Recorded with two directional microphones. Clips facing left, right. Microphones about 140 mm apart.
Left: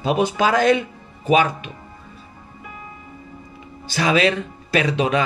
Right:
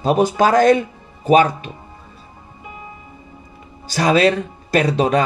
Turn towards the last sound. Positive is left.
turn(degrees=-40)  # may be behind; listen again after turning